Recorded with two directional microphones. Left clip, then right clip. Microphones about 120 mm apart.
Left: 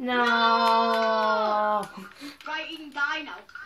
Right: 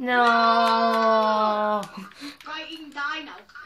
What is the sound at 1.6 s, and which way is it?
Speech, 40° right (ahead or behind).